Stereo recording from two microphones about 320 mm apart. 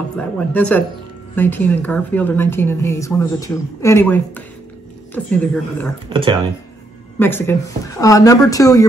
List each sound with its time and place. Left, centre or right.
0.4 s a woman's voice: centre
6.0 s speech: centre
7.2 s a woman's voice: centre